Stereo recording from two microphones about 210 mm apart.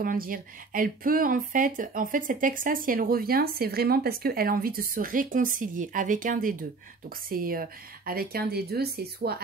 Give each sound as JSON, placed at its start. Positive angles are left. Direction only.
{"t": 0.0, "sound": "speech", "side_deg": -40}